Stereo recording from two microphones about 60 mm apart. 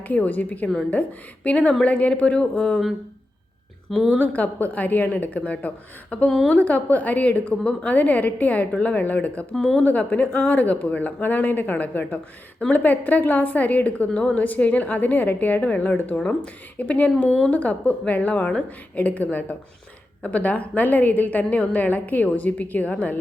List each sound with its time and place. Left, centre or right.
0.1 s a woman's voice: left
4.2 s a woman's voice: left
9.6 s speech: centre
9.8 s a woman's voice: left